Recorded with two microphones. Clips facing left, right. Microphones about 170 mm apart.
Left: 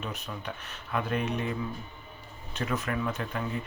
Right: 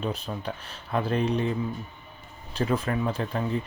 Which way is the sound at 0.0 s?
30° right (ahead or behind).